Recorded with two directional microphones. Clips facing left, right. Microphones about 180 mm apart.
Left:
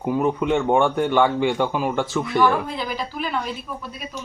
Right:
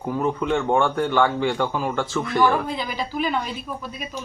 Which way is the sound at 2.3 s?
Centre (ahead or behind).